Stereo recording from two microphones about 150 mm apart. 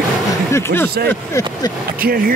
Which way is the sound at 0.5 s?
15° left (ahead or behind).